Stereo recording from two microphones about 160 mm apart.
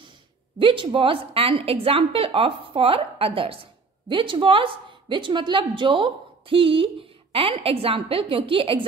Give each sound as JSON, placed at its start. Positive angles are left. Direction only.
{"t": 0.6, "sound": "a woman's voice", "side_deg": -30}